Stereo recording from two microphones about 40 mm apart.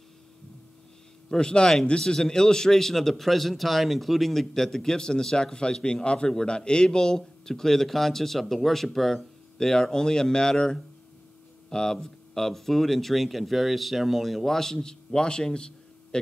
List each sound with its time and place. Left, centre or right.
1.3 s a man's voice: left